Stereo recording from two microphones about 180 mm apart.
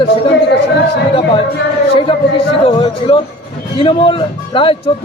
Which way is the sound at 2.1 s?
30° left (ahead or behind).